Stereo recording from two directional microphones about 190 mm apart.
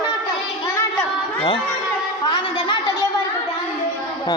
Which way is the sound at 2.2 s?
25° left (ahead or behind).